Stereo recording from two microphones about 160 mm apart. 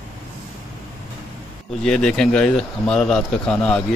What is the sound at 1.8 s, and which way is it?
Speech, 5° left (ahead or behind).